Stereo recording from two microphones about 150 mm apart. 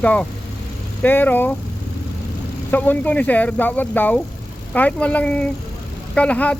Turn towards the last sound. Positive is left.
turn(degrees=10)  # may be behind; listen again after turning